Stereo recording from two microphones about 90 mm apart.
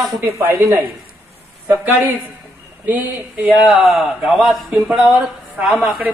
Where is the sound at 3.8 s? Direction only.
Centre (ahead or behind).